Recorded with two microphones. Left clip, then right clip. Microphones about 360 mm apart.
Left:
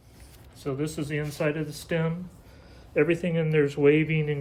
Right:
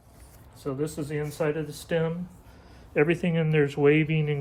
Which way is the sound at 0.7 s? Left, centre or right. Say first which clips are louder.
Even; centre.